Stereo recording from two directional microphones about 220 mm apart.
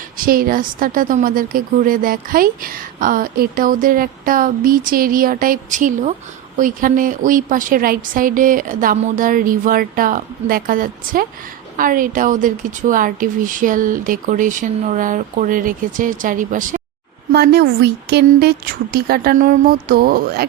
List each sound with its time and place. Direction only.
0.3 s a woman's voice: 40° right (ahead or behind)